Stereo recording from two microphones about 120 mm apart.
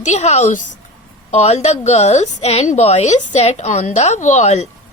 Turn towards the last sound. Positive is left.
turn(degrees=70)  # may be behind; listen again after turning